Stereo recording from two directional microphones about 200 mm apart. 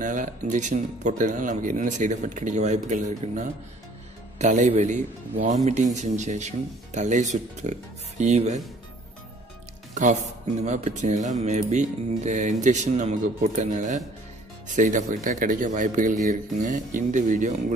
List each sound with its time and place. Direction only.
0.0 s speech: 40° right (ahead or behind)
10.6 s speech: 35° right (ahead or behind)